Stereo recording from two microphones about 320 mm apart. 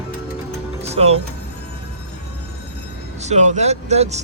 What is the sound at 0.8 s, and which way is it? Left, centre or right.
Music, centre.